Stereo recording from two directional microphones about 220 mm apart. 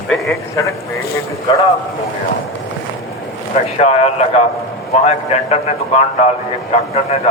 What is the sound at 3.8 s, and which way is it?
A man's voice, 30° left (ahead or behind).